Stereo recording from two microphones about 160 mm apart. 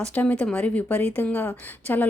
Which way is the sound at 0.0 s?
10° left (ahead or behind).